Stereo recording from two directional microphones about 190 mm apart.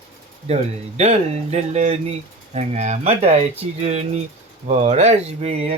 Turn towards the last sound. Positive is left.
turn(degrees=-35)  # may be behind; listen again after turning